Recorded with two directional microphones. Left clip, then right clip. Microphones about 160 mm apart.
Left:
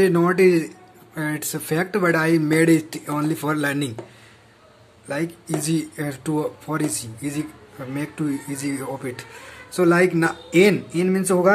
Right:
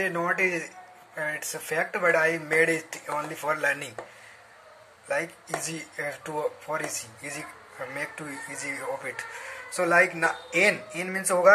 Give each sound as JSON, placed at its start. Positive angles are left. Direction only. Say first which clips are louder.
{"t": 0.0, "sound": "speech", "louder": "left 9 dB", "side_deg": 30}
{"t": 5.0, "sound": "speech", "louder": "left 2 dB", "side_deg": 15}
{"t": 7.9, "sound": "speech", "louder": "left 9 dB", "side_deg": 15}
{"t": 10.6, "sound": "speech", "louder": "left 6 dB", "side_deg": 35}
{"t": 11.0, "sound": "speech", "louder": "left 5 dB", "side_deg": 15}